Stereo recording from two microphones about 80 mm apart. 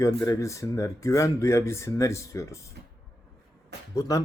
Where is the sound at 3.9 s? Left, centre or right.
Left.